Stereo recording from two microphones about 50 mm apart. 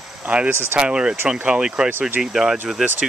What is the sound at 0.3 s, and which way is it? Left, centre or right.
Speech, centre.